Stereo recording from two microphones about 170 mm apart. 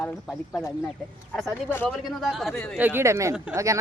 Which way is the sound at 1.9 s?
Centre (ahead or behind).